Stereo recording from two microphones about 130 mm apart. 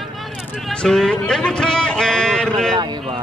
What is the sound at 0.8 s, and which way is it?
A man's voice, 5° left (ahead or behind).